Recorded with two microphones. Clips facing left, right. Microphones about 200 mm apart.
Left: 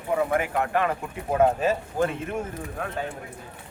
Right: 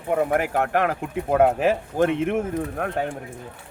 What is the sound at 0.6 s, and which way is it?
Speech, 70° right (ahead or behind).